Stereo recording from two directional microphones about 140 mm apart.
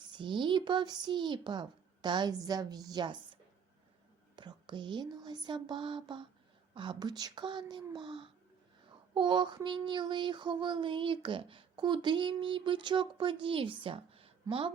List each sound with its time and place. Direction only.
0.1 s child singing: 35° right (ahead or behind)
4.4 s child singing: 35° right (ahead or behind)